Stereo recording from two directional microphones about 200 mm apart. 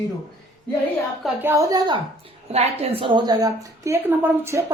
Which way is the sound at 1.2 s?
10° right (ahead or behind).